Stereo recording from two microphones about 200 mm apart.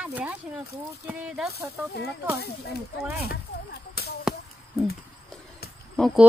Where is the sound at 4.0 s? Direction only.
50° left (ahead or behind).